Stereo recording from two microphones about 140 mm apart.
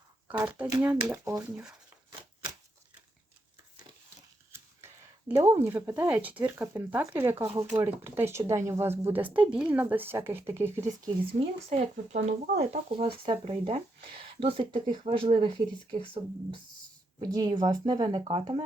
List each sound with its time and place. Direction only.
0.3 s speech: 10° right (ahead or behind)
1.1 s speech: 25° right (ahead or behind)
1.5 s speech: 10° right (ahead or behind)
4.5 s speech: 20° right (ahead or behind)
11.3 s speech: 40° right (ahead or behind)
12.1 s speech: 55° right (ahead or behind); by 18.2 s 30° right (ahead or behind)